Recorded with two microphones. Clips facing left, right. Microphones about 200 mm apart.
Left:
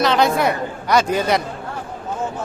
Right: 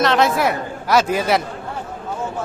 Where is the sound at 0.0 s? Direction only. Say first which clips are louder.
Even; centre (ahead or behind).